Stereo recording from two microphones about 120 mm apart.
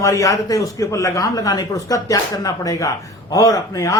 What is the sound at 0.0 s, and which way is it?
Speech, 25° left (ahead or behind).